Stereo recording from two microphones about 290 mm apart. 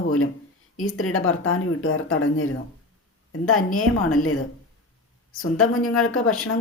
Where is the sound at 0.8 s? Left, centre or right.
Left.